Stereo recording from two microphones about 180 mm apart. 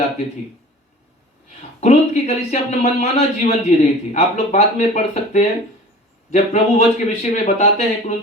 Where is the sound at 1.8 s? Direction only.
40° left (ahead or behind).